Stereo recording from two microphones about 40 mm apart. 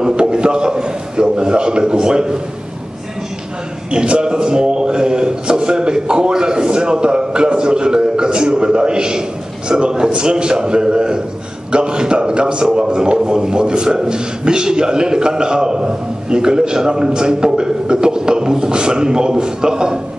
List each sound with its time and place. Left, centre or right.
0.0 s a man's voice: right
3.9 s a man's voice: right